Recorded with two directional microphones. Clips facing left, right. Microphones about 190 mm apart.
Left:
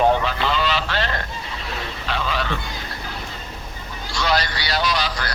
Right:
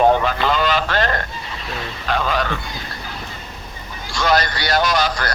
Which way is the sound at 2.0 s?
50° right (ahead or behind).